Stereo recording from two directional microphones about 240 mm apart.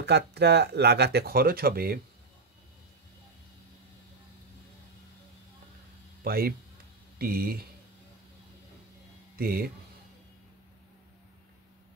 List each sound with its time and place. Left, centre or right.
0.0 s speech: right
6.2 s a man's voice: right
9.4 s speech: right